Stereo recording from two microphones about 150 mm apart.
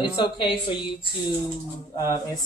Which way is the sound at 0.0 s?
35° left (ahead or behind).